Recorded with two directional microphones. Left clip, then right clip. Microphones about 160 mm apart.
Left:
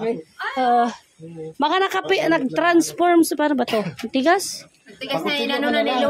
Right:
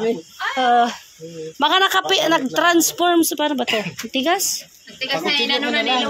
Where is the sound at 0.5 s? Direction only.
20° left (ahead or behind).